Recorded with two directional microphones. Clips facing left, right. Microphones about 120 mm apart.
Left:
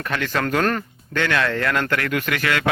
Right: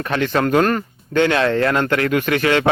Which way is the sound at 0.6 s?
5° right (ahead or behind).